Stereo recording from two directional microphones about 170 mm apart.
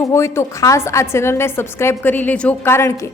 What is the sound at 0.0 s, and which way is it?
A woman's voice, 15° left (ahead or behind).